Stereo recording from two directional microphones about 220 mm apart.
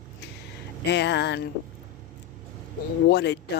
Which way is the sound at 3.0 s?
50° left (ahead or behind).